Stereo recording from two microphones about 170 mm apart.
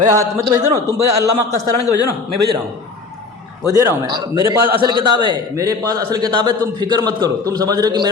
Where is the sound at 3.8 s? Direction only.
25° right (ahead or behind).